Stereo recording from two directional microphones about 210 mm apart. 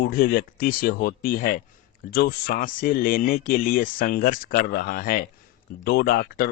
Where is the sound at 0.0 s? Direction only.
45° left (ahead or behind).